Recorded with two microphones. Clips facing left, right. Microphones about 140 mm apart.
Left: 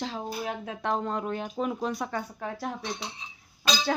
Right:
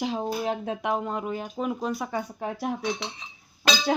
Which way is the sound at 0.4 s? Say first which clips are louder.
Right 6 dB; 30° right (ahead or behind).